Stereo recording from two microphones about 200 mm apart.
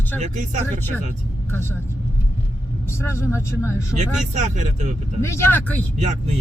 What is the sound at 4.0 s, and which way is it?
Speech, 35° right (ahead or behind).